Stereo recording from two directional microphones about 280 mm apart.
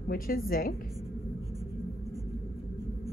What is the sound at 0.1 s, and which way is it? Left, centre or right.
Speech, left.